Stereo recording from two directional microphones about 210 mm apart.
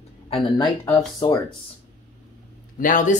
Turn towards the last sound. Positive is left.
turn(degrees=40)  # may be behind; listen again after turning